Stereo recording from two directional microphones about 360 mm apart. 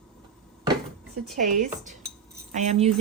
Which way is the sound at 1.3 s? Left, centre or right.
Right.